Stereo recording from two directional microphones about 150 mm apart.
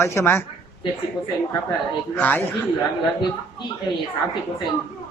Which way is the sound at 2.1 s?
10° left (ahead or behind).